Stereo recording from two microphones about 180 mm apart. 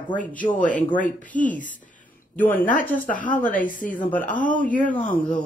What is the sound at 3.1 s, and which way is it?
Speech, 50° left (ahead or behind).